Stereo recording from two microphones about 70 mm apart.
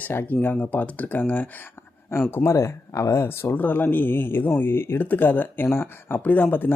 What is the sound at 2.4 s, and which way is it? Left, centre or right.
Speech, left.